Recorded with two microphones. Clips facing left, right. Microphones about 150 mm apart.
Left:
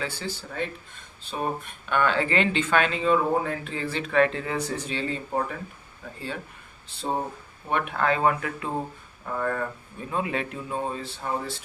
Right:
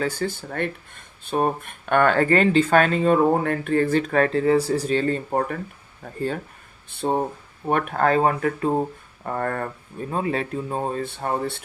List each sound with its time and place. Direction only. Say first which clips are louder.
0.0 s speech: right 7 dB; 45° right (ahead or behind)
6.9 s speech: right 6 dB; 55° right (ahead or behind)
7.7 s speech: right 5 dB; 45° right (ahead or behind)
9.2 s speech: right 2 dB; 60° right (ahead or behind)
10.1 s speech: right 3 dB; 35° right (ahead or behind); by 11.6 s 60° right (ahead or behind)